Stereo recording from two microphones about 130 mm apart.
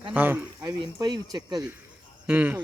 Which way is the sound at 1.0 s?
30° right (ahead or behind).